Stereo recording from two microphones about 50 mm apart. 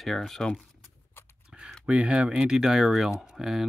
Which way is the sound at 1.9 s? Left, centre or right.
Right.